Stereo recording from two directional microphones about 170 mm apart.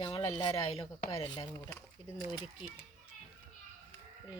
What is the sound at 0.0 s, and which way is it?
Speech, 30° left (ahead or behind).